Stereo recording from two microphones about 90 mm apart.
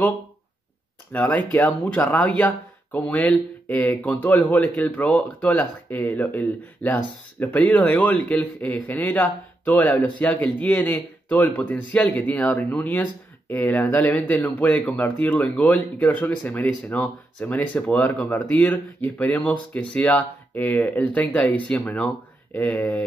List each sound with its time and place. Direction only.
1.1 s speech: 20° left (ahead or behind)